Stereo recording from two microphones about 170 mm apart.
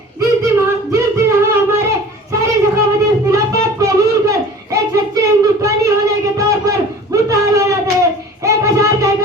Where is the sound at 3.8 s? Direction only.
20° right (ahead or behind).